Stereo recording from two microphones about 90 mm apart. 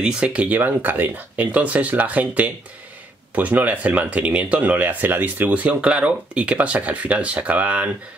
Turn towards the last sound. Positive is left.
turn(degrees=-15)  # may be behind; listen again after turning